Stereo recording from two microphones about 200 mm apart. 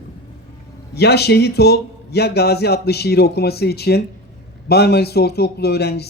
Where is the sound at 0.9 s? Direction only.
55° left (ahead or behind).